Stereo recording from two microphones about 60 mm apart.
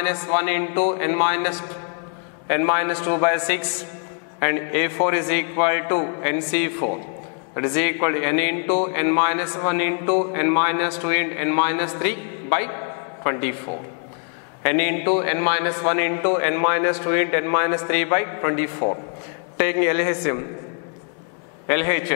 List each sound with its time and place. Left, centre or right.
0.0 s a man's voice: centre
14.6 s a man's voice: centre
21.6 s a man's voice: centre